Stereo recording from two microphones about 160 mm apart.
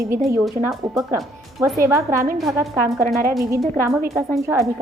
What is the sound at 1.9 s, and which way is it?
Speech, 20° right (ahead or behind).